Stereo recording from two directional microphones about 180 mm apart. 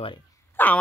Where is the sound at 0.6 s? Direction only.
10° left (ahead or behind).